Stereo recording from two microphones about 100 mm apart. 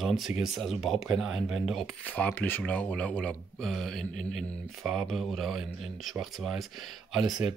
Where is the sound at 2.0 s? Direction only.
15° left (ahead or behind).